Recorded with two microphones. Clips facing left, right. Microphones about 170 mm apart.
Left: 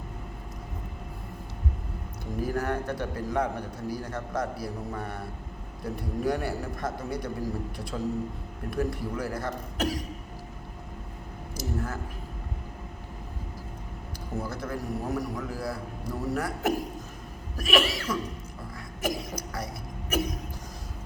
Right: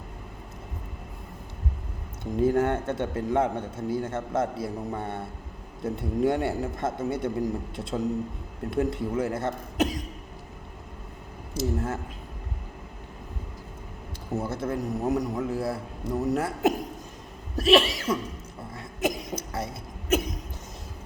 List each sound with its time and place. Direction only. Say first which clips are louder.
2.3 s a man's voice: right 6 dB; 25° right (ahead or behind)
11.5 s speech: right 5 dB; 25° right (ahead or behind)
14.3 s a man's voice: right 4 dB; 25° right (ahead or behind)
19.0 s cough: right 3 dB; 25° right (ahead or behind)